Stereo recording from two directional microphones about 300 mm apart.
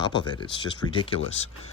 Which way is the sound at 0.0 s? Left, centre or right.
Centre.